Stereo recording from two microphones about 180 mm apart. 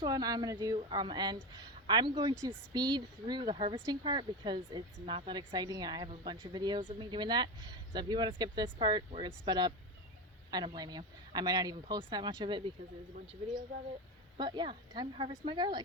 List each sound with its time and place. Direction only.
0.0 s speech: 20° right (ahead or behind)
14.3 s speech: 25° right (ahead or behind)